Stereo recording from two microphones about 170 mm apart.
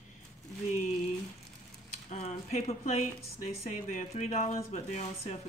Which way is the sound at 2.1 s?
40° left (ahead or behind).